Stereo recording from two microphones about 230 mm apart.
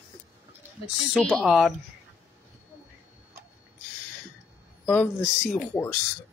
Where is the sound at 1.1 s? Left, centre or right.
Centre.